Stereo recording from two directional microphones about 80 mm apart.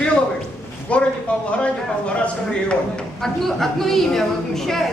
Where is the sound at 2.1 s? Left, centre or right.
Centre.